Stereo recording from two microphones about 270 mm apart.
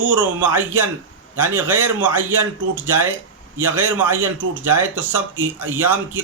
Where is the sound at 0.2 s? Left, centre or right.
Centre.